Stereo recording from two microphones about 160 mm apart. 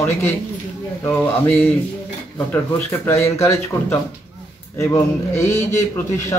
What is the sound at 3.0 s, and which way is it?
Speech, 15° left (ahead or behind).